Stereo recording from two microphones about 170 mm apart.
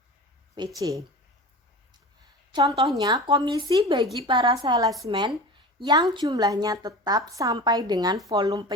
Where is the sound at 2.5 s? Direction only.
20° right (ahead or behind).